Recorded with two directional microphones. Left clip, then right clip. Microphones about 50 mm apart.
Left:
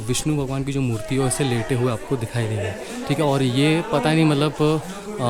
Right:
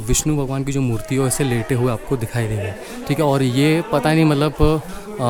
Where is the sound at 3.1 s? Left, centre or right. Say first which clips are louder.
Right 3 dB; right.